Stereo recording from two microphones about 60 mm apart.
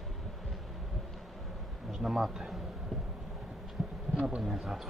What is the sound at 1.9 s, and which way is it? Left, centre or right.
Speech, centre.